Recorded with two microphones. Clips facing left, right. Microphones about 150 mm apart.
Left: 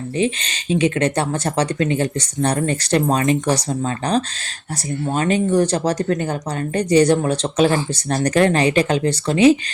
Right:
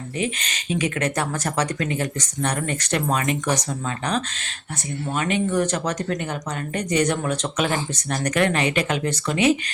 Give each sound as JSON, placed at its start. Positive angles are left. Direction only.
{"t": 0.2, "sound": "speech", "side_deg": 30}